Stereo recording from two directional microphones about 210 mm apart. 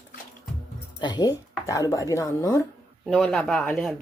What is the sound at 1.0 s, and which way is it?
Speech, 20° left (ahead or behind).